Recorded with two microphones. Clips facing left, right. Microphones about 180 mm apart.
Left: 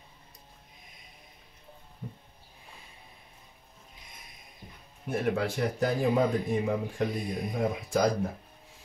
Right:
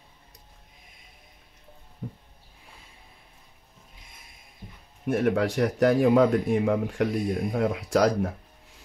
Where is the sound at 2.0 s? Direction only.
55° right (ahead or behind).